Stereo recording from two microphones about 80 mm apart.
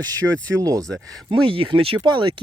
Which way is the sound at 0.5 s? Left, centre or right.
Right.